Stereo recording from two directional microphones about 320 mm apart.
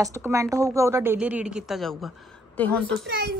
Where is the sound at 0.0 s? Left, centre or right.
Centre.